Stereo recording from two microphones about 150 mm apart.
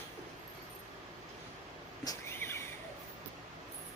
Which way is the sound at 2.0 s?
15° left (ahead or behind).